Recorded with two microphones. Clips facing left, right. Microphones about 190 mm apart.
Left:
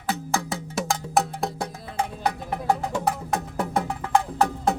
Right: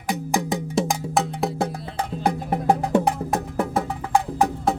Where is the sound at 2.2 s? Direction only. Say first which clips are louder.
Right 5 dB; 50° right (ahead or behind).